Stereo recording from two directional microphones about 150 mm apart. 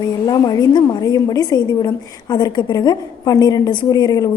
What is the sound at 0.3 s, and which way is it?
A woman's voice, 25° left (ahead or behind).